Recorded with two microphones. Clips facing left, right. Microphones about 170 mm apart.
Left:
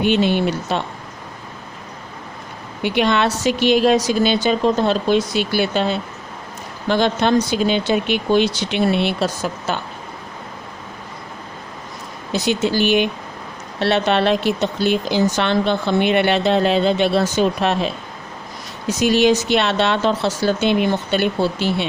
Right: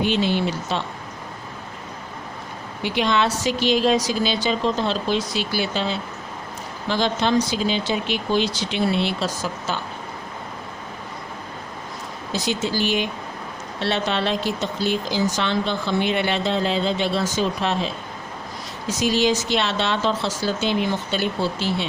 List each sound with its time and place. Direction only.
0.0 s speech: 60° left (ahead or behind)
2.8 s speech: 60° left (ahead or behind)
12.3 s speech: 65° left (ahead or behind)